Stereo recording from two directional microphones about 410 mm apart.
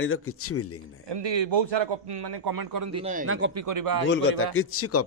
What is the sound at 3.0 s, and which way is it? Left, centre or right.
Speech, centre.